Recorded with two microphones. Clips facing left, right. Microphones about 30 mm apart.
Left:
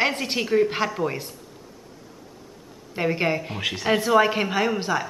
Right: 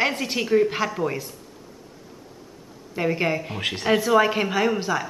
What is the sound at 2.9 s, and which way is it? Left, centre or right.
Speech, centre.